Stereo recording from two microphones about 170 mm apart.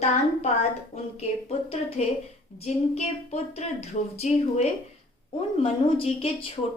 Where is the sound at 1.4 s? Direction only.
35° left (ahead or behind).